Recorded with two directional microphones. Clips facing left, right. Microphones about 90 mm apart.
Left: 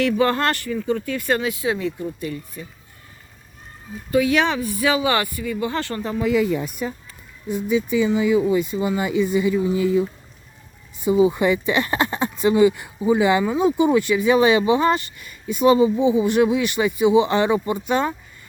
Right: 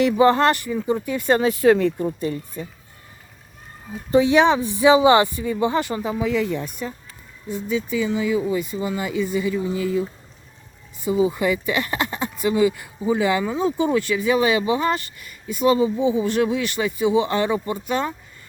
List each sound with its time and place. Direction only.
0.0 s speech: 20° right (ahead or behind)
1.4 s speech: 40° right (ahead or behind)
1.6 s speech: 55° right (ahead or behind)
2.2 s speech: 35° right (ahead or behind)
4.1 s speech: 25° right (ahead or behind); by 6.3 s 5° right (ahead or behind)
6.3 s speech: 5° left (ahead or behind); by 18.1 s 20° left (ahead or behind)